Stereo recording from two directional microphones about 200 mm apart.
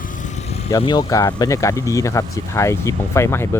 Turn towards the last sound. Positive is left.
turn(degrees=15)  # may be behind; listen again after turning